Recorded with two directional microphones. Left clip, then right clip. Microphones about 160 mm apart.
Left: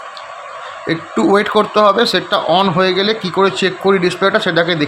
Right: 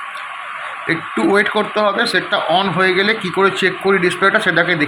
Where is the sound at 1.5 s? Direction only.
50° left (ahead or behind).